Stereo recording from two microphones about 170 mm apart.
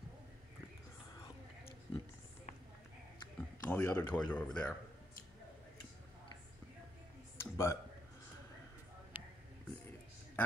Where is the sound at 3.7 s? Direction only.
15° left (ahead or behind).